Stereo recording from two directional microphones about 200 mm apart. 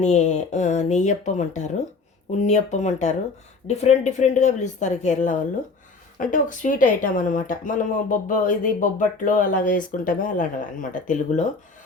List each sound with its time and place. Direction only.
0.0 s speech: 35° left (ahead or behind)